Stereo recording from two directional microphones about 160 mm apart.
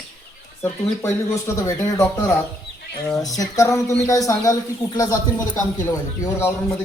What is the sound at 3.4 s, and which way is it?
Speech, 20° left (ahead or behind).